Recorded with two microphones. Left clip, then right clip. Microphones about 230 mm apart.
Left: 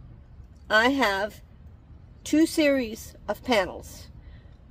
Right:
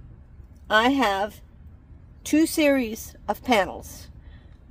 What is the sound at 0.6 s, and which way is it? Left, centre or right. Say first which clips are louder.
A woman's voice: right 1 dB; centre.